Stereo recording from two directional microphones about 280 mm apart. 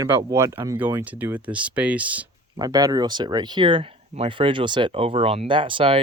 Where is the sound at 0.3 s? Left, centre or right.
Centre.